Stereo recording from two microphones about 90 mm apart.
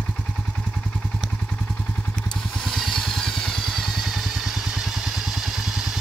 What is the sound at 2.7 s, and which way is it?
Vehicle, 5° left (ahead or behind).